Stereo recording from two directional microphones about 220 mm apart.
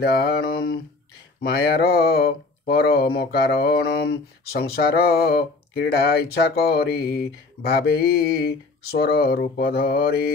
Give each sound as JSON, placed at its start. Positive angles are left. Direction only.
{"t": 0.0, "sound": "speech", "side_deg": 45}